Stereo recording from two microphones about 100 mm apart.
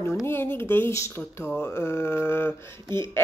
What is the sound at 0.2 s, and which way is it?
Speech, 25° left (ahead or behind).